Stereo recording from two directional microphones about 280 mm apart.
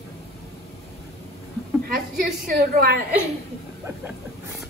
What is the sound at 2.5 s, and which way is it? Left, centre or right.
Speech, right.